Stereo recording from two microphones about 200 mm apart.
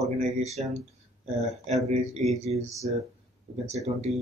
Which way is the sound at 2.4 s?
30° right (ahead or behind).